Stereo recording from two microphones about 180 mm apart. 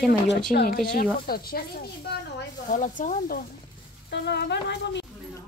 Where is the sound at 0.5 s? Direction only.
55° left (ahead or behind).